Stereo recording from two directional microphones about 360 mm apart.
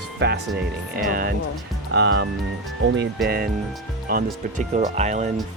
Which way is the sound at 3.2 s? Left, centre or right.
Right.